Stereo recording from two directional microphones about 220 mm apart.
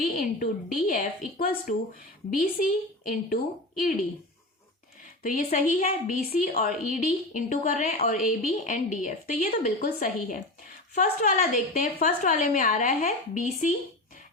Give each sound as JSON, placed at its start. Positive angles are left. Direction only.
{"t": 0.0, "sound": "a woman's voice", "side_deg": 40}
{"t": 5.2, "sound": "a woman's voice", "side_deg": 35}